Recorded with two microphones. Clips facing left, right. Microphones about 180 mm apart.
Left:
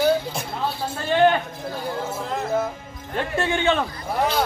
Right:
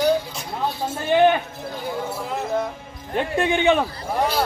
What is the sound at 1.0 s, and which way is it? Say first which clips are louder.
Speech: right 1 dB; 15° right (ahead or behind).